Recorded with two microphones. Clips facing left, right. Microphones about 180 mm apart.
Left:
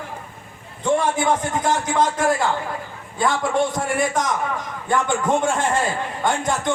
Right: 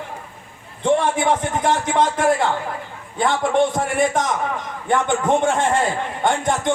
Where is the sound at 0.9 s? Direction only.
25° right (ahead or behind).